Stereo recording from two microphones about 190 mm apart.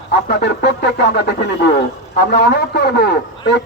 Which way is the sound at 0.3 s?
60° left (ahead or behind).